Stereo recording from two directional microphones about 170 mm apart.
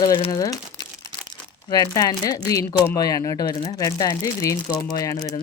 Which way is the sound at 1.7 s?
25° left (ahead or behind).